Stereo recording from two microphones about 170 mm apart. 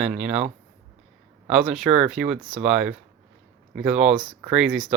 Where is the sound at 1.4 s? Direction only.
5° right (ahead or behind).